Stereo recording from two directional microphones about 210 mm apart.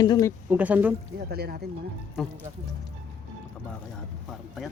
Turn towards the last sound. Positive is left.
turn(degrees=0)  # may be behind; listen again after turning